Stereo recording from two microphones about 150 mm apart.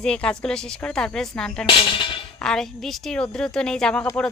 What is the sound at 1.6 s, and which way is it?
Speech, 35° left (ahead or behind).